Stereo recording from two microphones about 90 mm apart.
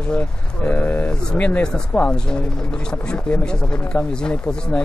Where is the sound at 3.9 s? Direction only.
10° left (ahead or behind).